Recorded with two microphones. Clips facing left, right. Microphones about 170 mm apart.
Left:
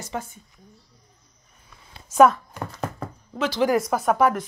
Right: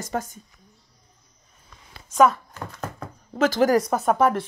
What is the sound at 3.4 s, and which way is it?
Speech, 45° right (ahead or behind).